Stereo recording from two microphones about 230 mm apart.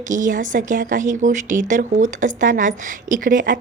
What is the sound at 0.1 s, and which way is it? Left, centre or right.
Speech, right.